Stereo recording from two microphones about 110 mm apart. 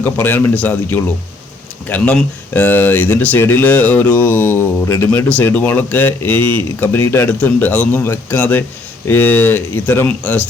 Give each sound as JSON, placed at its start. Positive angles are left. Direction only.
{"t": 0.0, "sound": "speech", "side_deg": 20}